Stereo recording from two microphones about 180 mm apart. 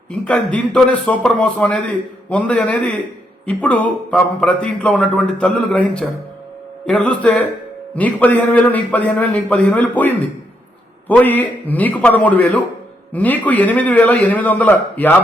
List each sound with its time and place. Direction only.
0.1 s speech: 5° left (ahead or behind)